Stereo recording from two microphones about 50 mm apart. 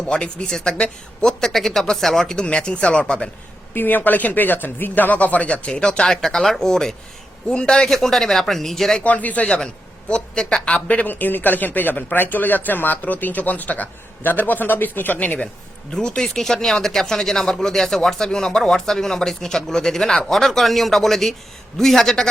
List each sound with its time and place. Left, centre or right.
0.1 s speech: centre
2.3 s speech: centre
3.8 s speech: left; by 6.1 s centre
6.2 s speech: centre
9.0 s speech: left
10.1 s speech: centre
10.8 s speech: left
15.9 s speech: centre